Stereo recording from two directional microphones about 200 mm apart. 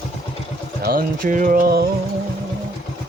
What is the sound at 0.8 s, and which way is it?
Speech, 45° right (ahead or behind).